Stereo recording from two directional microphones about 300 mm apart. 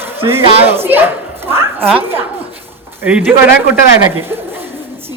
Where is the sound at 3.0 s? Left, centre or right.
Centre.